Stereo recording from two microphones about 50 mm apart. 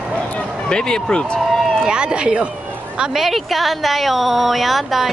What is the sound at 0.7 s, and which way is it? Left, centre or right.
Speech, centre.